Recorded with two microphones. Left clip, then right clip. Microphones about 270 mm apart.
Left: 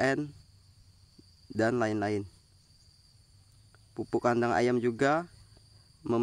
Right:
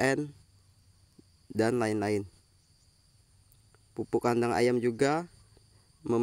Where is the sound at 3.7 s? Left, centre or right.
Centre.